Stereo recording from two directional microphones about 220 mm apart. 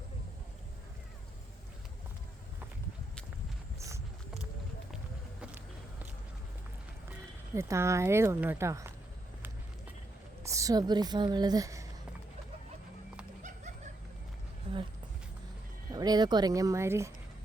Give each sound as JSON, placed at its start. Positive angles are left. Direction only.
{"t": 3.8, "sound": "a sound", "side_deg": -15}
{"t": 7.5, "sound": "speech", "side_deg": -10}
{"t": 10.4, "sound": "speech", "side_deg": -15}
{"t": 15.9, "sound": "speech", "side_deg": -15}